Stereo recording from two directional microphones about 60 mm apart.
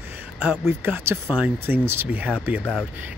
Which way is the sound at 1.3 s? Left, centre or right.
Right.